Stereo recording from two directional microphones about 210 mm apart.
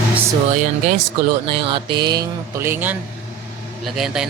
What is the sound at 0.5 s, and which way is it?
Speech, 35° right (ahead or behind).